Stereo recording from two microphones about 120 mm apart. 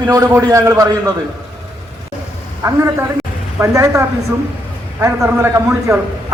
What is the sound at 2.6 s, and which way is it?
A man's voice, 30° right (ahead or behind).